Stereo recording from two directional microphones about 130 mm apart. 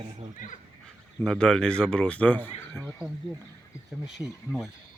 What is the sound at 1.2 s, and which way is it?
Speech, 5° left (ahead or behind).